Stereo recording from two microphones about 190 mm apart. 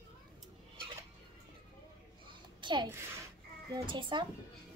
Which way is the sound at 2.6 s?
25° right (ahead or behind).